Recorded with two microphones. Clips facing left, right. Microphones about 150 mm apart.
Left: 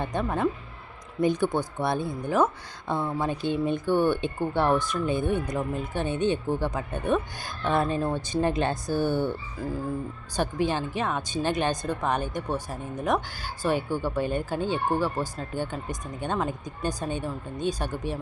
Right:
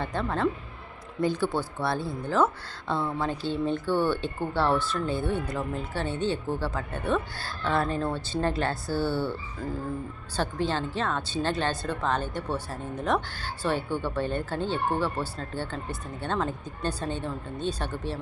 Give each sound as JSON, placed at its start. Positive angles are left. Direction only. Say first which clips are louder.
{"t": 0.0, "sound": "speech", "louder": "left 1 dB", "side_deg": 15}